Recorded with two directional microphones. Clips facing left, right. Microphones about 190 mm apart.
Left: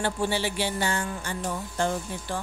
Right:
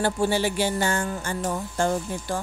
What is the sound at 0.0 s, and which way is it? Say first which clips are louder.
Speech: right 4 dB; 45° right (ahead or behind).